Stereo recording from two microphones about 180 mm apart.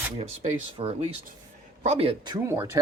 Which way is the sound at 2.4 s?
15° right (ahead or behind).